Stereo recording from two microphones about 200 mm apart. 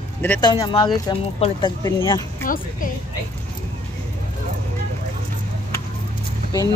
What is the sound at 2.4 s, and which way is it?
Speech, 45° left (ahead or behind).